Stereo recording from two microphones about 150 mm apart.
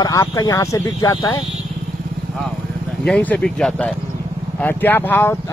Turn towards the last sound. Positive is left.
turn(degrees=15)  # may be behind; listen again after turning